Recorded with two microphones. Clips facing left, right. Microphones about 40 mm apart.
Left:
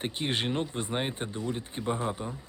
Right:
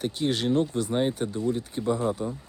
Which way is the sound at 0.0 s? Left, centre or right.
Left.